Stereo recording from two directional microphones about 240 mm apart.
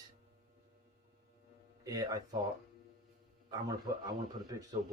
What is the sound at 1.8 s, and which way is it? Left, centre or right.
Speech, centre.